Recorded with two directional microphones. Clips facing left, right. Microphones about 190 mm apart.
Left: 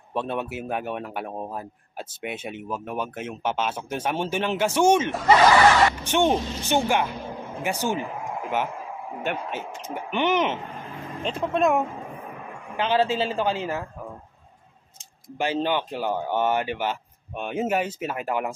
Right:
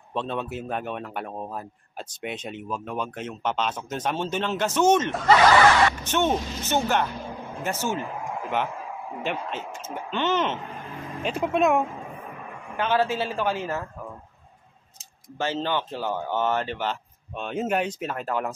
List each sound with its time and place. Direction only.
0.1 s a man's voice: 10° left (ahead or behind)
9.2 s a man's voice: 5° left (ahead or behind)
11.2 s speech: 5° right (ahead or behind)
12.8 s a man's voice: 15° left (ahead or behind)
15.3 s a man's voice: 15° left (ahead or behind)